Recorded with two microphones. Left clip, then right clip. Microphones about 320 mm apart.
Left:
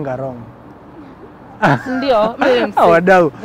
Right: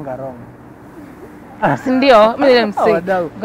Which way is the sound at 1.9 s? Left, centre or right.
Right.